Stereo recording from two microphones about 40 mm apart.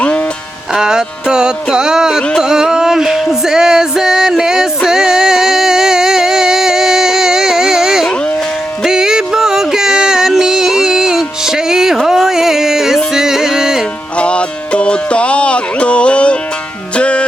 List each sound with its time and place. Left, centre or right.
0.7 s music: centre
14.2 s music: left